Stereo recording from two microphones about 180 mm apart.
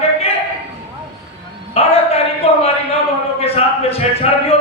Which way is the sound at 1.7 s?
35° left (ahead or behind).